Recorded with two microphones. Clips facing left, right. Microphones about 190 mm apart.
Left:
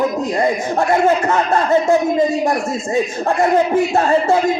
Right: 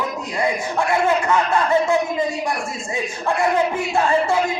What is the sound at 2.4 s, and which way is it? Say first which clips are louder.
Speech: left 7 dB; 40° left (ahead or behind).